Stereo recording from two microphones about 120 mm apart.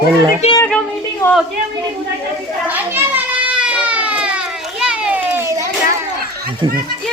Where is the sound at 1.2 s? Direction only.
20° left (ahead or behind).